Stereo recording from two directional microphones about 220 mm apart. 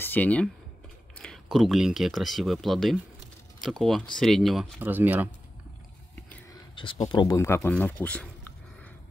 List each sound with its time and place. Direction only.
0.0 s speech: 5° left (ahead or behind); by 5.3 s 10° right (ahead or behind)
6.7 s speech: 25° left (ahead or behind); by 8.3 s 5° left (ahead or behind)